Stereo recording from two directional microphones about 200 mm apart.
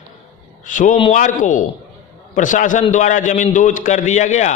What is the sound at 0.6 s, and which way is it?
A man's voice, 40° left (ahead or behind).